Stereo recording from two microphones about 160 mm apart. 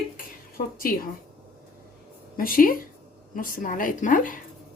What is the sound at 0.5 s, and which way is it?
Speech, 65° left (ahead or behind).